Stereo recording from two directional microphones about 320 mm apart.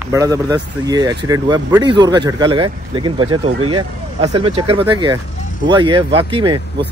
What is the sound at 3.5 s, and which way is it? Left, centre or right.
Speech, right.